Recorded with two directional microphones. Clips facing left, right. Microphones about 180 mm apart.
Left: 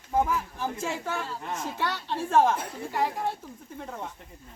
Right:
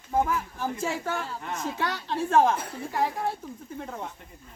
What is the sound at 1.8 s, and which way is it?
Speech, 10° right (ahead or behind).